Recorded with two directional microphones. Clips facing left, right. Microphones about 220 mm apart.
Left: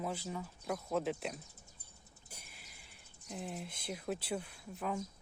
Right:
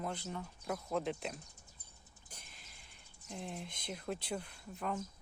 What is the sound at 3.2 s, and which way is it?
Speech, 5° left (ahead or behind).